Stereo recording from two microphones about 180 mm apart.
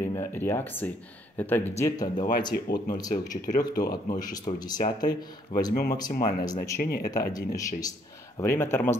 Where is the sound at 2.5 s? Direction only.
55° left (ahead or behind).